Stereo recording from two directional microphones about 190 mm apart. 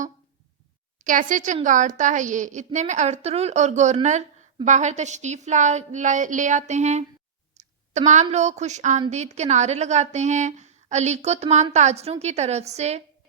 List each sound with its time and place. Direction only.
1.0 s a woman's voice: 45° right (ahead or behind)